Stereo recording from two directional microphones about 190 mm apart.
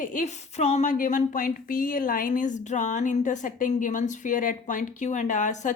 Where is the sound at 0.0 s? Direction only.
40° left (ahead or behind).